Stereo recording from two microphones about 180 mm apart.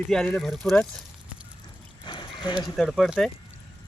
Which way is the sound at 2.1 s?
25° left (ahead or behind).